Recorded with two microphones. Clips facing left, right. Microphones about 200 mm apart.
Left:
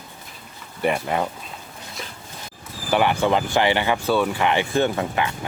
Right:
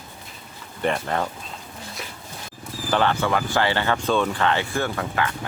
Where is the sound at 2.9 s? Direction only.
15° left (ahead or behind).